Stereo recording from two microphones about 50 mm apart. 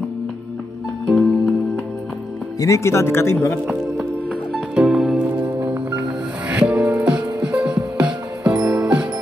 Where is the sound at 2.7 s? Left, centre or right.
Left.